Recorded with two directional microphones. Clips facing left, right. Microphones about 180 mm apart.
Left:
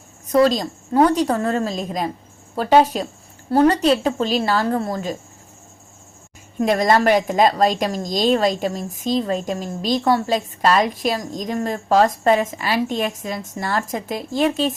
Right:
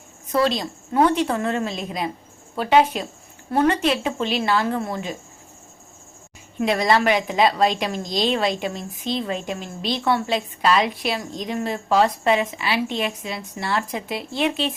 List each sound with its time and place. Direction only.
0.3 s a woman's voice: 40° left (ahead or behind)
6.6 s a woman's voice: 45° left (ahead or behind)